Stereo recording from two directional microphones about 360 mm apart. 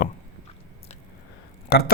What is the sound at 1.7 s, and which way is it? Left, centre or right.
Speech, left.